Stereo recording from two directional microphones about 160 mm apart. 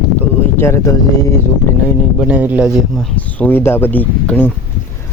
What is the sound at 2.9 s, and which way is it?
Speech, 10° left (ahead or behind).